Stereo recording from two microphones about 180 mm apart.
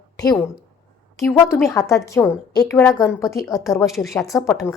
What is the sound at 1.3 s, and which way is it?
Speech, 15° left (ahead or behind).